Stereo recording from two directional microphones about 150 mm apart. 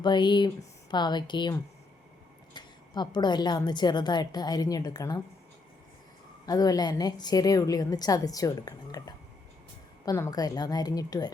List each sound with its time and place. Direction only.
0.0 s a woman's voice: 30° left (ahead or behind)
6.4 s a woman's voice: 25° left (ahead or behind)